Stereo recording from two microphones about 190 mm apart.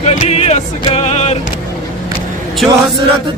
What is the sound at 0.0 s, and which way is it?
Music, 35° left (ahead or behind).